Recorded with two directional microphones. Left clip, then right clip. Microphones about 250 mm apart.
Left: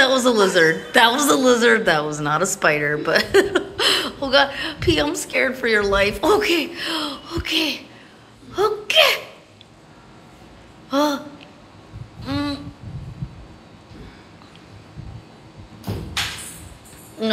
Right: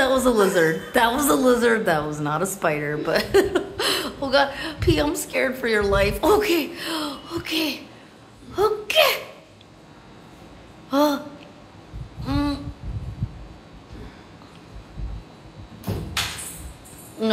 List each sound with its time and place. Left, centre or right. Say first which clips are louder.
0.0 s a woman's voice: left 3 dB; centre
10.9 s a woman's voice: even; centre
12.2 s a sound: even; centre